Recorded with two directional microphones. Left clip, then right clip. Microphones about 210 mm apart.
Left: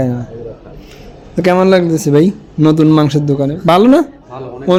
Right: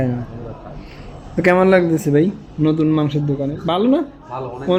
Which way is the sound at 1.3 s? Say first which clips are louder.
Left 3 dB; 15° left (ahead or behind).